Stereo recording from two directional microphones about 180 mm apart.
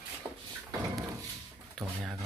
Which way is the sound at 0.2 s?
20° right (ahead or behind).